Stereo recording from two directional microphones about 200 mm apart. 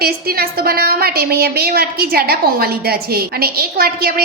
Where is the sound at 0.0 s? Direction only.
50° right (ahead or behind).